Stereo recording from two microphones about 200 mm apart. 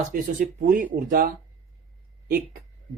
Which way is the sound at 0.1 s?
40° right (ahead or behind).